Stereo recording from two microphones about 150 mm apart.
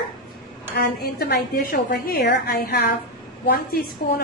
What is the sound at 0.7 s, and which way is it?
A woman's voice, 90° left.